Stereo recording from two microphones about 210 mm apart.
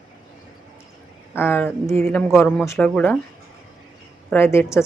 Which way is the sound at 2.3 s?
Centre (ahead or behind).